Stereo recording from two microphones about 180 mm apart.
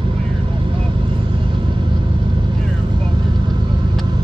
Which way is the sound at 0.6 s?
30° right (ahead or behind).